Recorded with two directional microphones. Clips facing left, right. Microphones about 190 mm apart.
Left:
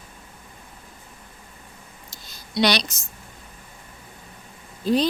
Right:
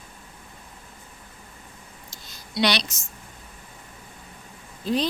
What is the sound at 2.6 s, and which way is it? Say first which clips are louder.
Speech: left 2 dB; 40° left (ahead or behind).